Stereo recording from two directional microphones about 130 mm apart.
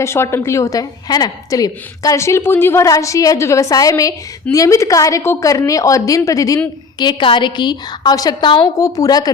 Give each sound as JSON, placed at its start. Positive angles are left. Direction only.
{"t": 0.0, "sound": "a woman's voice", "side_deg": 20}
{"t": 7.0, "sound": "a woman's voice", "side_deg": 35}